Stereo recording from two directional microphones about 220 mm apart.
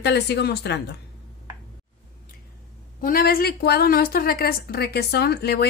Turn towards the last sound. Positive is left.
turn(degrees=45)  # may be behind; listen again after turning